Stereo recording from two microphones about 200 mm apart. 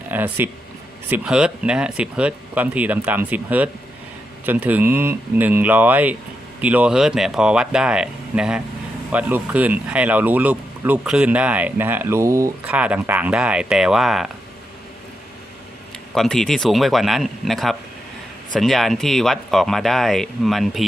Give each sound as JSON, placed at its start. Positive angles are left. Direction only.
{"t": 0.1, "sound": "speech", "side_deg": -10}
{"t": 16.1, "sound": "speech", "side_deg": 0}